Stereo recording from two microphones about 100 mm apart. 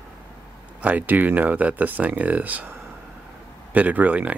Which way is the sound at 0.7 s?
15° right (ahead or behind).